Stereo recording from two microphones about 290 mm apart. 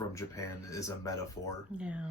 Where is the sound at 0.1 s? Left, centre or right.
Centre.